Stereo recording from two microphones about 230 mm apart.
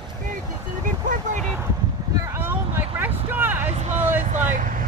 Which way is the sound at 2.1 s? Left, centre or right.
Centre.